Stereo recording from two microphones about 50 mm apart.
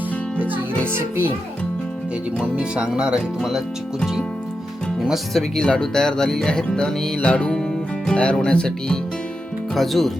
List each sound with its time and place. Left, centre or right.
0.3 s music: right
0.9 s a child's voice: right
2.4 s speech: centre
5.3 s speech: centre
9.7 s speech: centre